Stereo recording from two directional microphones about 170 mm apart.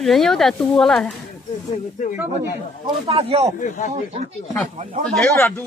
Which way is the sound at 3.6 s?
50° left (ahead or behind).